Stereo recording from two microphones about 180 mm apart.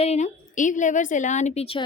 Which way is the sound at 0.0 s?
40° left (ahead or behind).